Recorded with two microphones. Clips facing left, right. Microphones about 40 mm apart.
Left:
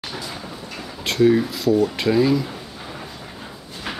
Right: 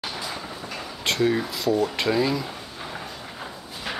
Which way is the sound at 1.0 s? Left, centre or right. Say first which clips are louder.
Left 6 dB; centre.